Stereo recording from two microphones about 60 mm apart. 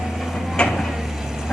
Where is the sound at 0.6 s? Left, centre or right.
Centre.